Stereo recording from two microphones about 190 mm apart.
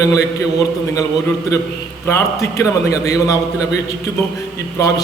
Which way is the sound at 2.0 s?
15° left (ahead or behind).